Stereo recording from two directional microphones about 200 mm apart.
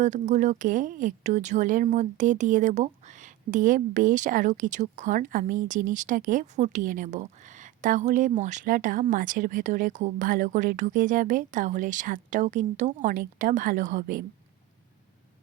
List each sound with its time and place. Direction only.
0.0 s speech: 35° right (ahead or behind)